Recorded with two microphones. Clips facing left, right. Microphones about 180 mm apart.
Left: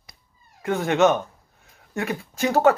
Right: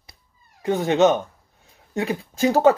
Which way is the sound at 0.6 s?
20° right (ahead or behind).